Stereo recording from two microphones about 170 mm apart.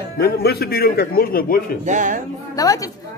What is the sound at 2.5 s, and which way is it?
Speech, 20° left (ahead or behind).